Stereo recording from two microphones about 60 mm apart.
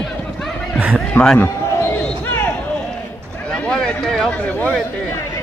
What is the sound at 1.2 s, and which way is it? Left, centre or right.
Speech, left.